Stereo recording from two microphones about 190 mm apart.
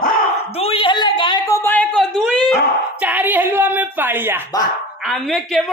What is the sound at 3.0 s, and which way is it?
A woman's voice, 10° right (ahead or behind).